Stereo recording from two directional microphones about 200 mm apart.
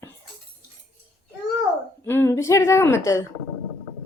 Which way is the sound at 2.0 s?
10° left (ahead or behind).